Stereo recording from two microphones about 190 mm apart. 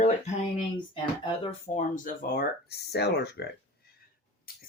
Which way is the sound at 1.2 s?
30° left (ahead or behind).